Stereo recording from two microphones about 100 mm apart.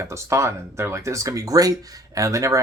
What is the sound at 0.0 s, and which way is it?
Speech, 30° right (ahead or behind).